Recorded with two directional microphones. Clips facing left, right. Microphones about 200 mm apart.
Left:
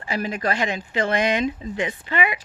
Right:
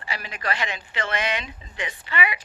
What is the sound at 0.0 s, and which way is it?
Speech, 45° left (ahead or behind).